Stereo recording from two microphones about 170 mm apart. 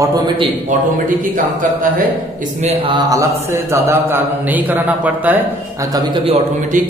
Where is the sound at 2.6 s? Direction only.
40° right (ahead or behind).